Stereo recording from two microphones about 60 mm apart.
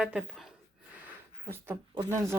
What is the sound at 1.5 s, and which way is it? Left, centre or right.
Speech, right.